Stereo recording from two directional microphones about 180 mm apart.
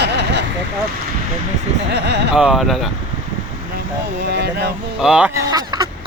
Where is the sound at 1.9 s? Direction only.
70° right (ahead or behind).